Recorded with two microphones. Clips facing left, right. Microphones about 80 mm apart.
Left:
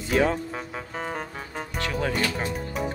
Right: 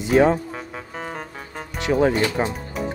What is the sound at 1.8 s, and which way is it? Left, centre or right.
Speech, right.